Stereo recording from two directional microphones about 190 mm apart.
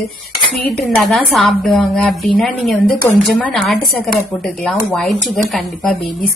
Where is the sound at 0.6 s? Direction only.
Centre (ahead or behind).